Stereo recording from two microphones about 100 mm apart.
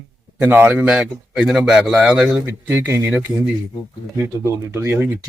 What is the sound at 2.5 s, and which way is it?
Speech, 20° right (ahead or behind).